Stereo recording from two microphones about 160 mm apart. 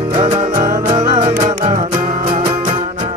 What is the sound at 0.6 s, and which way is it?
Music, 55° right (ahead or behind).